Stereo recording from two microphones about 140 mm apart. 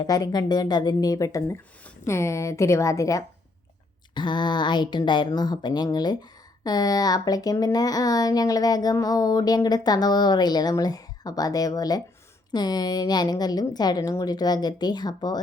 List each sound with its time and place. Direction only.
0.0 s a woman's voice: 25° left (ahead or behind)